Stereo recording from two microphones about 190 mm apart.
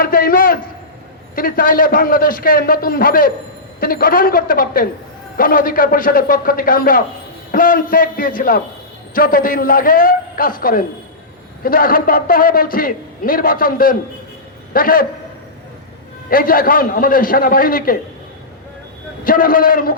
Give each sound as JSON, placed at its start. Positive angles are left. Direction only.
{"t": 0.0, "sound": "a man's voice", "side_deg": 50}
{"t": 16.3, "sound": "a man's voice", "side_deg": 50}
{"t": 19.2, "sound": "a man's voice", "side_deg": 50}